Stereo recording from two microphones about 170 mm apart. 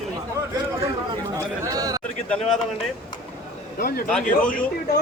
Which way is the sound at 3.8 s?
60° left (ahead or behind).